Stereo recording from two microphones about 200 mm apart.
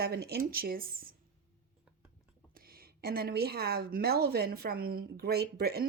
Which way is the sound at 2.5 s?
50° right (ahead or behind).